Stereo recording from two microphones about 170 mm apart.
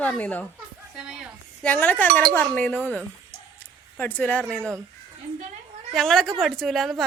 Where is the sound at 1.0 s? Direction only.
5° right (ahead or behind).